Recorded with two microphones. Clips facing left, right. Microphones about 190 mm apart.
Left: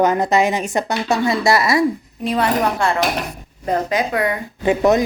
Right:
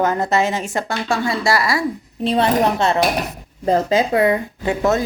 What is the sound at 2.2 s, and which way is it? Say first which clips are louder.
Speech: right 2 dB; 25° right (ahead or behind).